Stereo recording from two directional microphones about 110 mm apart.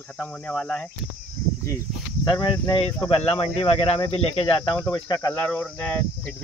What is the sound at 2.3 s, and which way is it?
Speech, 45° left (ahead or behind).